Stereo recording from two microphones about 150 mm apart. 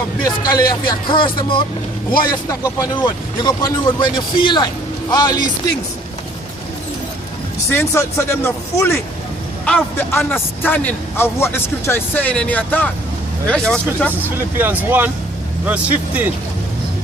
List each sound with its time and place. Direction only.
0.3 s a man's voice: 25° left (ahead or behind)
7.7 s a man's voice: 15° left (ahead or behind)
14.3 s speech: 15° right (ahead or behind)